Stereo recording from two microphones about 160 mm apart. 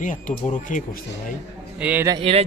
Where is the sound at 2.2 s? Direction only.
40° right (ahead or behind).